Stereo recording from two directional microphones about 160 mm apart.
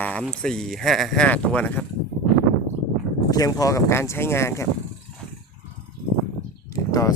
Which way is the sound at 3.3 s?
25° left (ahead or behind).